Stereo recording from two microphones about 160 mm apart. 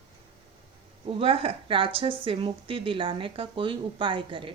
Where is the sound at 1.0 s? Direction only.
35° right (ahead or behind).